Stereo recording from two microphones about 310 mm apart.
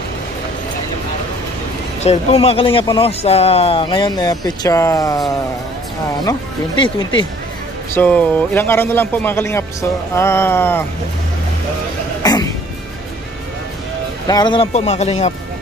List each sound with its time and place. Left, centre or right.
2.0 s speech: centre
6.8 s speech: left
7.9 s speech: centre
12.2 s throat clearing: centre
14.3 s speech: centre